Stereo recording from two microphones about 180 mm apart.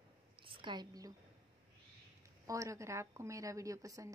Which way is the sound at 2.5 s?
15° right (ahead or behind).